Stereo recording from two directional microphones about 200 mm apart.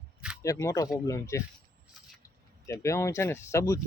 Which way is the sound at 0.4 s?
15° left (ahead or behind).